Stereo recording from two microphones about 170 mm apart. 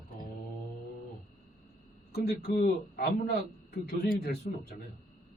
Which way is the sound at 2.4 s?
65° left (ahead or behind).